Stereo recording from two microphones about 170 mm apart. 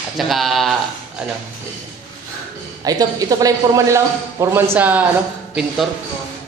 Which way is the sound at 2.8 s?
20° right (ahead or behind).